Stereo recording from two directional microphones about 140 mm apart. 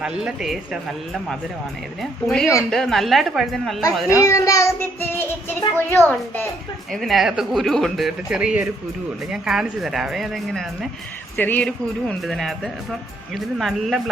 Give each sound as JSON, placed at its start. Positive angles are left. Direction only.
{"t": 0.0, "sound": "speech", "side_deg": -5}
{"t": 4.2, "sound": "child singing", "side_deg": 25}
{"t": 6.9, "sound": "speech", "side_deg": 0}
{"t": 11.3, "sound": "speech", "side_deg": 10}